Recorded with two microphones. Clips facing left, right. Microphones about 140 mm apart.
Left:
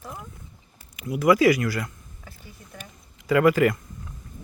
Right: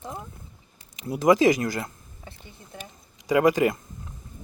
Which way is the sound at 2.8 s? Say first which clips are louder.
Right 2 dB; 15° right (ahead or behind).